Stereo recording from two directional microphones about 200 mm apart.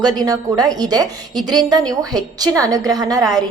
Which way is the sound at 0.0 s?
20° right (ahead or behind).